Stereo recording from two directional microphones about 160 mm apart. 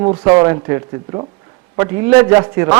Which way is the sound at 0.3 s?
20° right (ahead or behind).